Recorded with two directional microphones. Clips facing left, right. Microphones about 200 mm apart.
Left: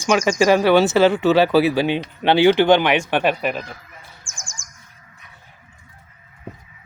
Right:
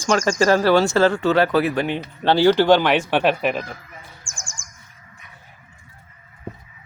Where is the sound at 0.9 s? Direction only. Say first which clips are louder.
Left 2 dB; 20° left (ahead or behind).